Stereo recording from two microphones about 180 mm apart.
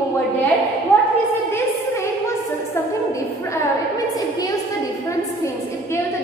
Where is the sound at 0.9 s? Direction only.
5° left (ahead or behind).